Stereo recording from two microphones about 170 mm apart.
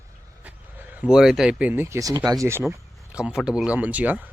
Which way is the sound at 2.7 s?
5° right (ahead or behind).